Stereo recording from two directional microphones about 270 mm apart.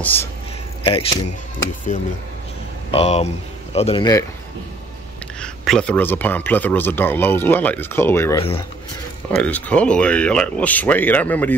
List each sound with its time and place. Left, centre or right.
0.0 s a man's voice: centre
0.8 s speech: centre
2.9 s speech: left
5.4 s a man's voice: centre